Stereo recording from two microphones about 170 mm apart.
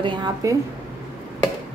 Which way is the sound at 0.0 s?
25° right (ahead or behind).